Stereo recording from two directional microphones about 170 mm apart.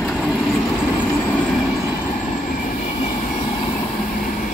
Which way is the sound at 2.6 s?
45° left (ahead or behind).